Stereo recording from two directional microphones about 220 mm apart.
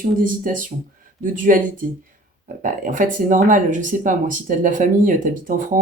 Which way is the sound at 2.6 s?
35° right (ahead or behind).